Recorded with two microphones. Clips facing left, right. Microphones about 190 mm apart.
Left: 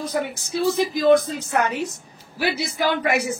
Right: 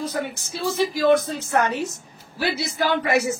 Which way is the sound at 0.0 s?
15° left (ahead or behind).